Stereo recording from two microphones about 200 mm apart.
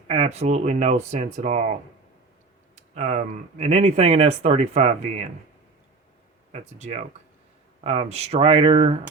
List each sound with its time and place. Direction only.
0.1 s speech: 30° right (ahead or behind)
2.9 s speech: 35° right (ahead or behind)
6.5 s speech: 35° right (ahead or behind)